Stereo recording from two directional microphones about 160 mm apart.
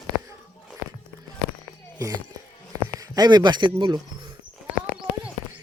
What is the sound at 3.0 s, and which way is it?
Speech, 25° right (ahead or behind).